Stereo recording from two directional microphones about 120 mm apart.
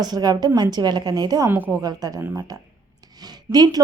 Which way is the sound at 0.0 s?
35° right (ahead or behind).